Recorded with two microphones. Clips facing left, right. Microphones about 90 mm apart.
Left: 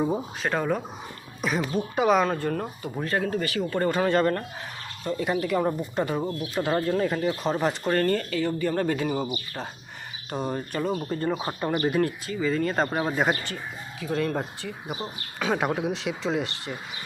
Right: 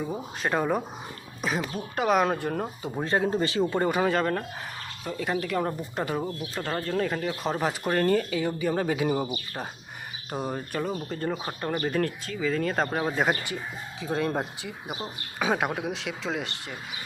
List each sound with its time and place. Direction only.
0.4 s speech: 10° right (ahead or behind)
3.0 s speech: 20° right (ahead or behind)
4.1 s speech: centre (ahead or behind)
10.3 s speech: 5° right (ahead or behind)
14.0 s speech: 20° right (ahead or behind)
15.4 s speech: 5° right (ahead or behind)